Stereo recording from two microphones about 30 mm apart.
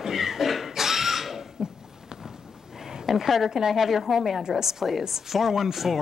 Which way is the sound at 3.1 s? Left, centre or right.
Centre.